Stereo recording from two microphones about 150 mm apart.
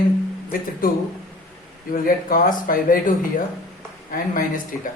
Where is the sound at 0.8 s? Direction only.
70° left (ahead or behind).